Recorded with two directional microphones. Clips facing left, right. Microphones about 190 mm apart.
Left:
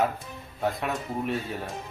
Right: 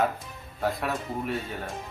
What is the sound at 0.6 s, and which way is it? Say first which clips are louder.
Speech: even; centre (ahead or behind).